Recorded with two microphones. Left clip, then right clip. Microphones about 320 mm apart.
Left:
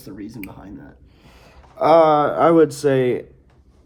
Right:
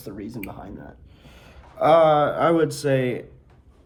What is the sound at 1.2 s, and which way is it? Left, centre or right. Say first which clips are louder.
Speech: left 1 dB; centre.